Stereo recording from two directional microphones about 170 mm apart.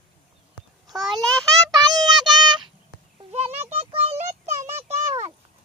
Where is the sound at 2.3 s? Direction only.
25° right (ahead or behind).